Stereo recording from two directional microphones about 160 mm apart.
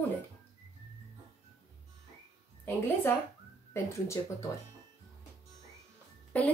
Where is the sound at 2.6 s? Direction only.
15° left (ahead or behind).